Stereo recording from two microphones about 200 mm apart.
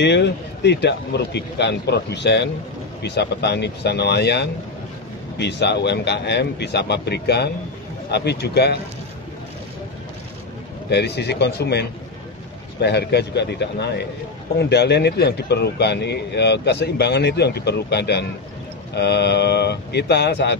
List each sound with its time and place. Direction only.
0.0 s speech: 60° left (ahead or behind)
10.9 s speech: 55° left (ahead or behind)